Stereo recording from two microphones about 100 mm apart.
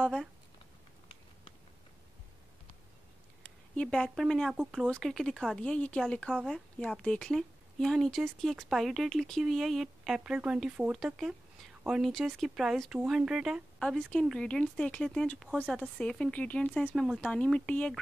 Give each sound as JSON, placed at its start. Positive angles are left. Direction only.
{"t": 0.0, "sound": "speech", "side_deg": 0}
{"t": 3.4, "sound": "a sound", "side_deg": 10}
{"t": 4.1, "sound": "speech", "side_deg": 0}
{"t": 13.7, "sound": "speech", "side_deg": 10}